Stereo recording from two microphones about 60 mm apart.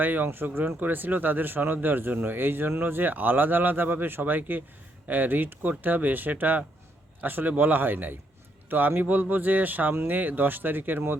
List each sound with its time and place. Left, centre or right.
0.0 s speech: right